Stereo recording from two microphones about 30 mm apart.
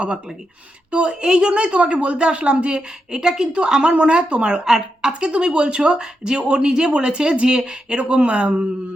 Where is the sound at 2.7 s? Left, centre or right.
Right.